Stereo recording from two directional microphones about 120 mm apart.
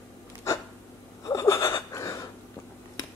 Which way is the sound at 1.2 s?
25° left (ahead or behind).